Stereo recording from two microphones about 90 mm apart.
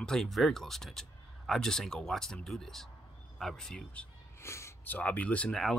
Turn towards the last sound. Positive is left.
turn(degrees=10)  # may be behind; listen again after turning